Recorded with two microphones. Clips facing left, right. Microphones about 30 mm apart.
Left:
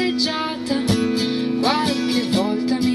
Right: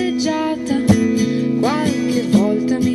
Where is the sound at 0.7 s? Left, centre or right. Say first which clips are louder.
Right 5 dB; left.